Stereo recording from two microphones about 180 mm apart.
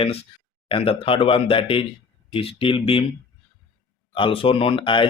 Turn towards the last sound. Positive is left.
turn(degrees=30)  # may be behind; listen again after turning